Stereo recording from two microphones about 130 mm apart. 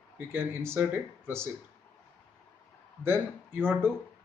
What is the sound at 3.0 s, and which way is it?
Speech, 20° right (ahead or behind).